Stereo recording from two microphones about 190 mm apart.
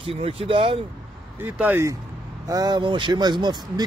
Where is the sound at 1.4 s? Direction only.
10° right (ahead or behind).